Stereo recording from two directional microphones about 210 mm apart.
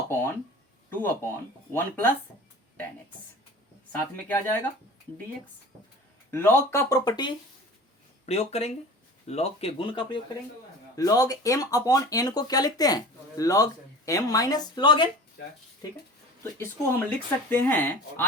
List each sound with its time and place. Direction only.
0.1 s speech: 10° left (ahead or behind)
6.3 s speech: 10° left (ahead or behind)
8.3 s speech: 30° left (ahead or behind)
16.4 s speech: 10° left (ahead or behind)